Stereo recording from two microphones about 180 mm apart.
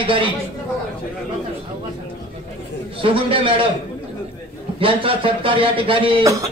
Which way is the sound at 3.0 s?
30° right (ahead or behind).